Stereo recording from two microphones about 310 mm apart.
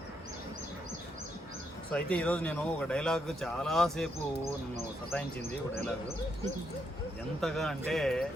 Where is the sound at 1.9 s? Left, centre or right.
Centre.